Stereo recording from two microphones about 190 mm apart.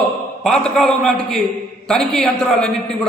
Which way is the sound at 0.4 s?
Centre (ahead or behind).